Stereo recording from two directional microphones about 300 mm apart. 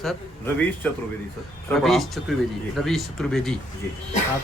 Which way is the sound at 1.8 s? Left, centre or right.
Centre.